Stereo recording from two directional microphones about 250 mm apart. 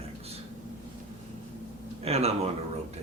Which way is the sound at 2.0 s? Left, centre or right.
Right.